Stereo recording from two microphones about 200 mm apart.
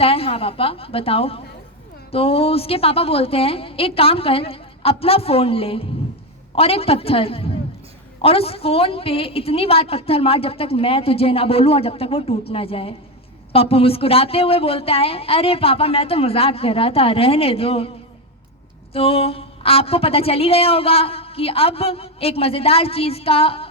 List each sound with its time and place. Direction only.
0.0 s a woman's voice: 30° left (ahead or behind)
18.9 s a woman's voice: 30° left (ahead or behind)